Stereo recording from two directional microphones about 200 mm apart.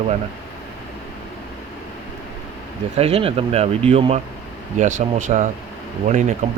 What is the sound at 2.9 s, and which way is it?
Speech, 30° right (ahead or behind).